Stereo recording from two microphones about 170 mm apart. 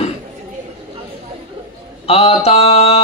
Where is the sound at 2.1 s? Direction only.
35° left (ahead or behind).